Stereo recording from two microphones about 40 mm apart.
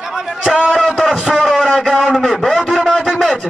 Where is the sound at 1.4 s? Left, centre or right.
Centre.